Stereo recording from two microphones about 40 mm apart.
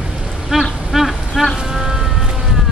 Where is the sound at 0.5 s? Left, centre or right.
Centre.